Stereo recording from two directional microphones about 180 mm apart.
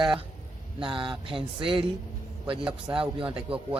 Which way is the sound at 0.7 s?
30° right (ahead or behind).